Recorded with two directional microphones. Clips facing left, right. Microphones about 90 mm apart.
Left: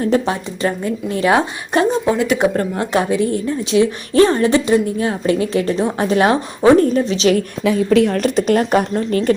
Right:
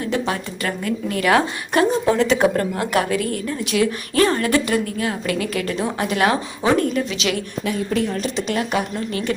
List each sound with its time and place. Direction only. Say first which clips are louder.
0.0 s a woman's voice: left 6 dB; 30° left (ahead or behind)
7.9 s a woman's voice: left 8 dB; 75° left (ahead or behind)
8.4 s speech: left 8 dB; 45° left (ahead or behind)